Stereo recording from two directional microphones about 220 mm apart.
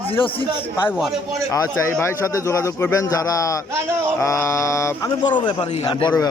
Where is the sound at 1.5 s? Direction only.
10° left (ahead or behind).